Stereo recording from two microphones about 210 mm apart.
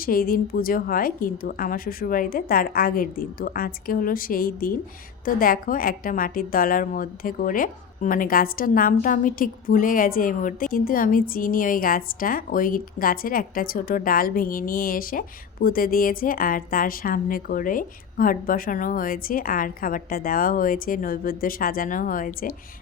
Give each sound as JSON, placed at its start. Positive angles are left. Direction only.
{"t": 0.0, "sound": "a woman's voice", "side_deg": 45}